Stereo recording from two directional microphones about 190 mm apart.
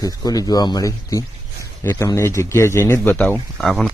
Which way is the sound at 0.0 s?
20° left (ahead or behind).